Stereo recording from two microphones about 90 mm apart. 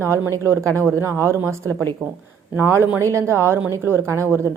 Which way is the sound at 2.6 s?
25° right (ahead or behind).